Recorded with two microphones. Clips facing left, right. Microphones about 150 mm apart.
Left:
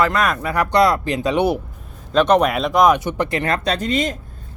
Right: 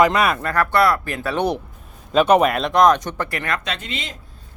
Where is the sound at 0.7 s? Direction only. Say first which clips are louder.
Left 4 dB; 20° left (ahead or behind).